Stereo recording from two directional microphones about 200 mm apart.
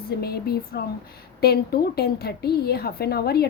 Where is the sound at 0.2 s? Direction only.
55° left (ahead or behind).